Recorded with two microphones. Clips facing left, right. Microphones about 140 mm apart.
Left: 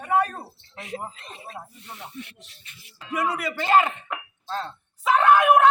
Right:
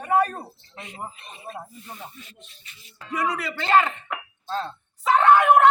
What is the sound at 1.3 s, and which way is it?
Speech, 80° left.